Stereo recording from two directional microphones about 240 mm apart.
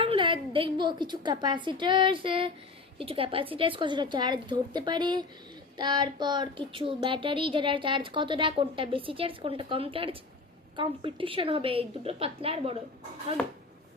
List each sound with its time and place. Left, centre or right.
0.0 s a woman's voice: right
13.4 s speech: centre